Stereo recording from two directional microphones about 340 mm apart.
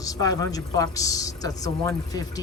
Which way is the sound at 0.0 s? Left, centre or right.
Centre.